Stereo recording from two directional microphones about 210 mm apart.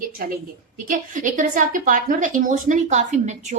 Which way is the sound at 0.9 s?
40° right (ahead or behind).